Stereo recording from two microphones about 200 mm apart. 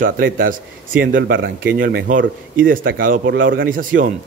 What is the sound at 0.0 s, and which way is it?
Speech, 45° right (ahead or behind).